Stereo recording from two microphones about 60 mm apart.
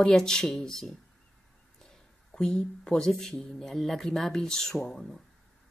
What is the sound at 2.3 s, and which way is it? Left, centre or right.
Speech, centre.